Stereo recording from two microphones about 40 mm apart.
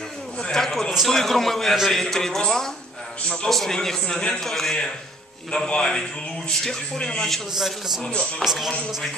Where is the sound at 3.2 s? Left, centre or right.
Left.